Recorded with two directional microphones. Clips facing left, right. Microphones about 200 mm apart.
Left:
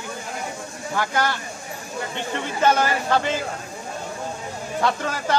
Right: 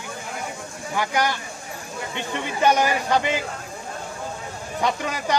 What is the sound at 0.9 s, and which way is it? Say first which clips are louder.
A man's voice: even; 15° right (ahead or behind).